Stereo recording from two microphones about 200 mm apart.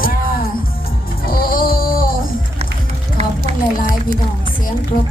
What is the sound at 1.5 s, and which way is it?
Music, 45° left (ahead or behind).